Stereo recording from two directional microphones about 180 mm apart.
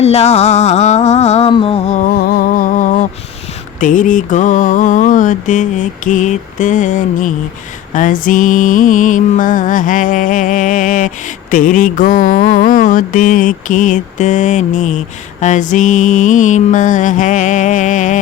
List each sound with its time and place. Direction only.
0.0 s music: 35° left (ahead or behind)
3.8 s mantra: 45° left (ahead or behind)